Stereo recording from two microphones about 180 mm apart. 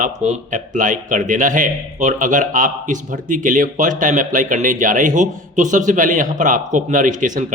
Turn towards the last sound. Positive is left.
turn(degrees=-45)  # may be behind; listen again after turning